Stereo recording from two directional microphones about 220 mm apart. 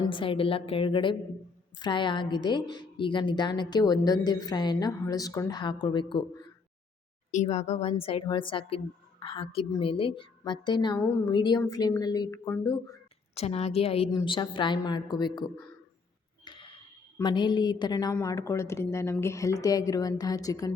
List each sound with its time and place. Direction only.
0.0 s a woman's voice: 25° left (ahead or behind)
7.3 s a woman's voice: 30° left (ahead or behind); by 13.0 s 15° left (ahead or behind)
13.3 s a woman's voice: 30° left (ahead or behind)
16.4 s a sound: 20° left (ahead or behind)
17.2 s a woman's voice: 20° left (ahead or behind)